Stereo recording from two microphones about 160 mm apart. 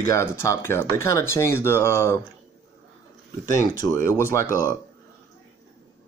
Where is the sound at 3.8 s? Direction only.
15° left (ahead or behind).